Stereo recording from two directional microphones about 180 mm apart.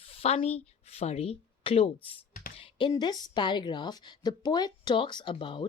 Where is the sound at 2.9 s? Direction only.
25° left (ahead or behind).